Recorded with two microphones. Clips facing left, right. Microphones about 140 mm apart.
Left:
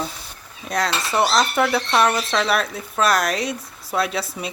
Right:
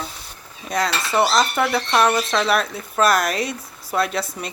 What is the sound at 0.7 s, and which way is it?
Speech, centre (ahead or behind).